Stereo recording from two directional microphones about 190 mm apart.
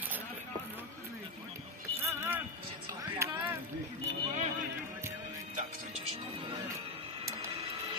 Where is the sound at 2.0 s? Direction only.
15° right (ahead or behind).